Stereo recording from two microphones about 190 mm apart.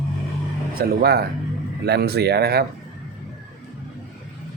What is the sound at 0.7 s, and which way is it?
Speech, 55° right (ahead or behind).